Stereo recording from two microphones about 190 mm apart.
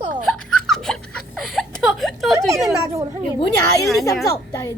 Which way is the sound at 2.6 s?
15° right (ahead or behind).